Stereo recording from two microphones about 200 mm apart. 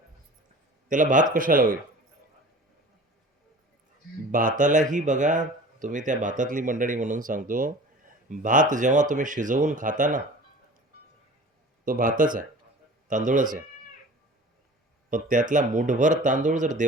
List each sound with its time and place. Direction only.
0.9 s speech: 40° right (ahead or behind)
4.3 s speech: 45° right (ahead or behind)
11.9 s speech: 40° right (ahead or behind)
15.1 s speech: 40° right (ahead or behind)